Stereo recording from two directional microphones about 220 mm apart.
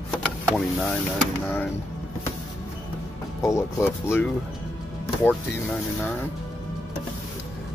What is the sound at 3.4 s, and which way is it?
Speech, 10° left (ahead or behind).